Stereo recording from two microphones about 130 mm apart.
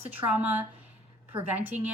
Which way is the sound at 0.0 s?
15° right (ahead or behind).